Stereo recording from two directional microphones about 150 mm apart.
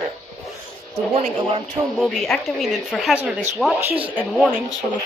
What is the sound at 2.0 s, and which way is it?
Speech, 5° left (ahead or behind).